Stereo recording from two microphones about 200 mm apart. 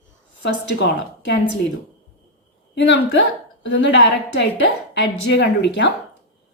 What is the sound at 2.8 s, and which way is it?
A woman's voice, 60° left (ahead or behind).